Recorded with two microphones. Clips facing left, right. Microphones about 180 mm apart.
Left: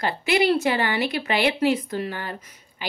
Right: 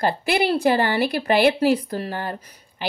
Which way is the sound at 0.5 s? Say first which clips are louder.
Right 4 dB; 35° right (ahead or behind).